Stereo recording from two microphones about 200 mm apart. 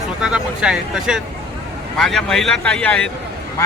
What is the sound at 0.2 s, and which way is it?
A man's voice, 5° right (ahead or behind).